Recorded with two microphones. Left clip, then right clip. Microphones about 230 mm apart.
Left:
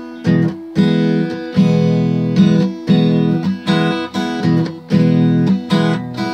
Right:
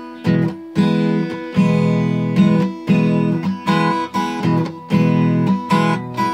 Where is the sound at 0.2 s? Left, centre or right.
Centre.